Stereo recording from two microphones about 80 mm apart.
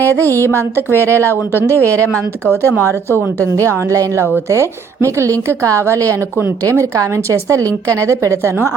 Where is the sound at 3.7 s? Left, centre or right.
Right.